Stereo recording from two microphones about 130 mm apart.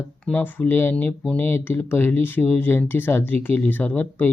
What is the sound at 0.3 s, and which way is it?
Speech, 15° left (ahead or behind).